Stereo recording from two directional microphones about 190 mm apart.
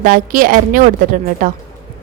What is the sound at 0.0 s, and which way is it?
Speech, 45° right (ahead or behind).